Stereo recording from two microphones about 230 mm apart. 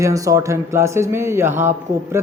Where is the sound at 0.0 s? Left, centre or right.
Centre.